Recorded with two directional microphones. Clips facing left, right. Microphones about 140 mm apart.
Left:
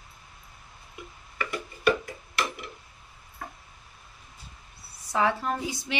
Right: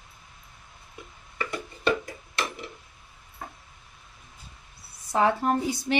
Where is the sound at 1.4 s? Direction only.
25° right (ahead or behind).